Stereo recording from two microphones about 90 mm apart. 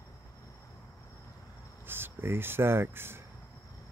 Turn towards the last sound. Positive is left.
turn(degrees=-25)  # may be behind; listen again after turning